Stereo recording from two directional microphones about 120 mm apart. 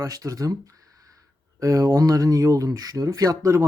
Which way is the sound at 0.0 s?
30° right (ahead or behind).